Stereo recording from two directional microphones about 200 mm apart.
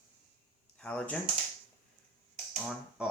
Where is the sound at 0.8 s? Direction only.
5° left (ahead or behind).